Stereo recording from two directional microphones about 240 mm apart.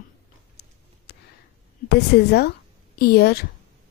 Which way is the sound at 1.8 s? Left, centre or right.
Left.